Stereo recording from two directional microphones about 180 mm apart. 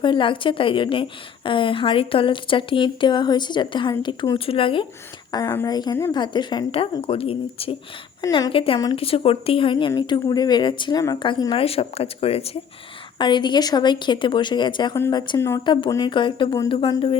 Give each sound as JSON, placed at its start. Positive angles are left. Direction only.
{"t": 0.0, "sound": "a woman's voice", "side_deg": 25}
{"t": 5.3, "sound": "a woman's voice", "side_deg": 20}
{"t": 14.9, "sound": "speech", "side_deg": 15}
{"t": 15.6, "sound": "a woman's voice", "side_deg": 25}